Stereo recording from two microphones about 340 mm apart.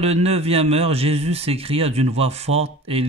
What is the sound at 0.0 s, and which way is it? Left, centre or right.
Speech, centre.